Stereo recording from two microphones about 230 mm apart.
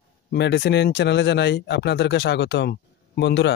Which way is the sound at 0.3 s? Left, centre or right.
Left.